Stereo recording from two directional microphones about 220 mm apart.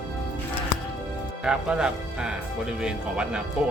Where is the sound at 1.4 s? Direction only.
5° right (ahead or behind).